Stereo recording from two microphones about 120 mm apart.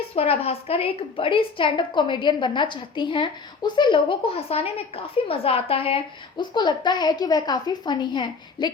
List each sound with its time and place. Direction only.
0.2 s a woman's voice: 55° left (ahead or behind)